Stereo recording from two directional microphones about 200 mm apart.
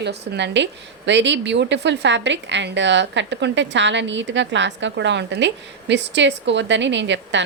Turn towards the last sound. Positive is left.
turn(degrees=-65)  # may be behind; listen again after turning